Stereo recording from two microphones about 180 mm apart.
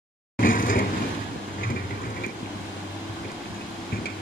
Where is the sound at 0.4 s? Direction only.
50° left (ahead or behind).